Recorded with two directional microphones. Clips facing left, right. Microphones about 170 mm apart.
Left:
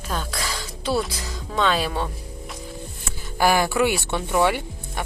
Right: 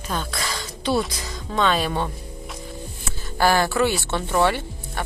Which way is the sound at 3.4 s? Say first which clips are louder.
Even; 15° left (ahead or behind).